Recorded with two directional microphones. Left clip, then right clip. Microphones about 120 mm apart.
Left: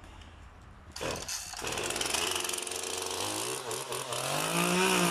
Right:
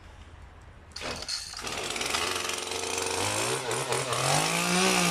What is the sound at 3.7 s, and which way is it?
Chainsaw, 90° left.